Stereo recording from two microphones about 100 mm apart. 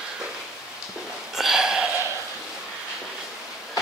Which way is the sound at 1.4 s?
5° right (ahead or behind).